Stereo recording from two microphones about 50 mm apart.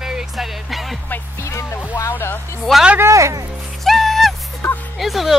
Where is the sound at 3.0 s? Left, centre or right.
Right.